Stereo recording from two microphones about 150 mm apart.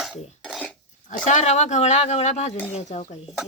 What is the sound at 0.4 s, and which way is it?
Dishes, 5° left (ahead or behind).